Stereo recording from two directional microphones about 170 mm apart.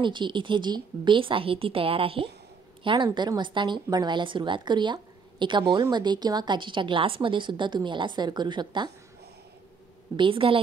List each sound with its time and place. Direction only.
0.0 s a woman's voice: 30° right (ahead or behind)
10.1 s a woman's voice: 30° right (ahead or behind)